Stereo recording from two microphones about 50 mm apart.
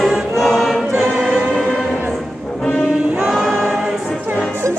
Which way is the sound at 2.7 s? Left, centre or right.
Right.